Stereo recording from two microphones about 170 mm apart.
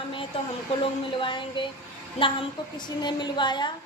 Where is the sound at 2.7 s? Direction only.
25° left (ahead or behind).